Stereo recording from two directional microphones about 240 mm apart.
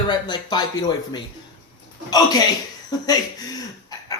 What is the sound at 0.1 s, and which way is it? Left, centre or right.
Speech, centre.